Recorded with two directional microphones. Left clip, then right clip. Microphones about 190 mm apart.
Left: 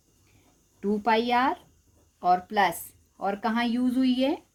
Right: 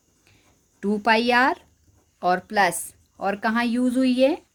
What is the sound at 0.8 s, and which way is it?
A woman's voice, 45° right (ahead or behind).